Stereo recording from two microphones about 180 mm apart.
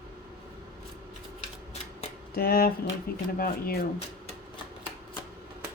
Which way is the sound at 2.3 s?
55° left (ahead or behind).